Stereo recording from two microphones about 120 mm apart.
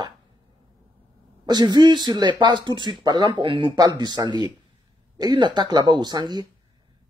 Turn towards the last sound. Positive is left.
turn(degrees=-35)  # may be behind; listen again after turning